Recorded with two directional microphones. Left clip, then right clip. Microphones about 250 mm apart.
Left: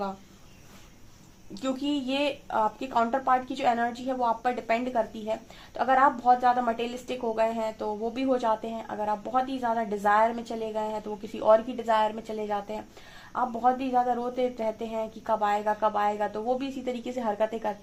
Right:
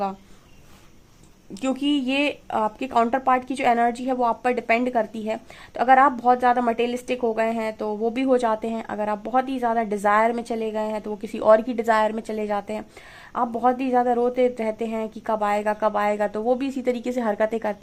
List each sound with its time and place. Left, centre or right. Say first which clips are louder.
1.6 s speech: right 6 dB; right